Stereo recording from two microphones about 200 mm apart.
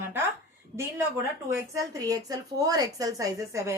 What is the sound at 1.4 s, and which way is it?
A woman's voice, 15° right (ahead or behind).